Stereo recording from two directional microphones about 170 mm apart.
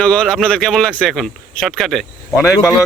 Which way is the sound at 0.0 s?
5° left (ahead or behind).